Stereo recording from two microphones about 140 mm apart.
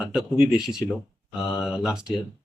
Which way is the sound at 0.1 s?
5° right (ahead or behind).